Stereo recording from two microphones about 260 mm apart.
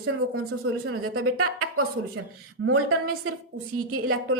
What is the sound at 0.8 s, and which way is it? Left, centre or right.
Speech, right.